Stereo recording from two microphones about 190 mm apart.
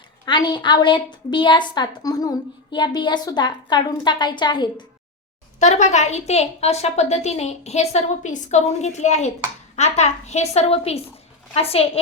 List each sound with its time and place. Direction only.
0.3 s a woman's voice: 25° left (ahead or behind)
5.5 s a woman's voice: 40° left (ahead or behind)